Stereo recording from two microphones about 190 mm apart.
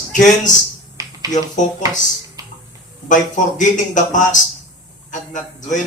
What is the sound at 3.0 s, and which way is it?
Speech, 40° left (ahead or behind).